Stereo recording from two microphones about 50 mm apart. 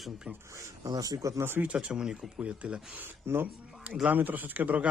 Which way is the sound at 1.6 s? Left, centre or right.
Right.